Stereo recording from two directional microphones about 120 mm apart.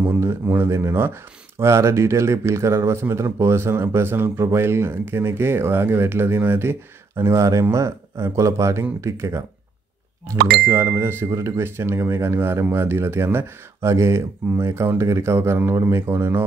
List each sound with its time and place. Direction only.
0.2 s speech: 20° right (ahead or behind)